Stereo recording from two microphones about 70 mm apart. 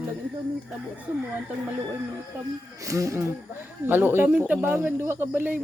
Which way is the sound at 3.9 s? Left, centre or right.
Right.